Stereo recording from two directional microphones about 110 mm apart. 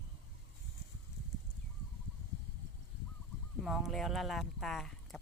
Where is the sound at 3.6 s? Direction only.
5° right (ahead or behind).